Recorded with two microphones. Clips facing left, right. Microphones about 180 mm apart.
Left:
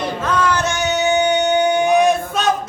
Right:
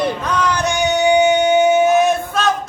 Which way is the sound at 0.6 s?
15° right (ahead or behind).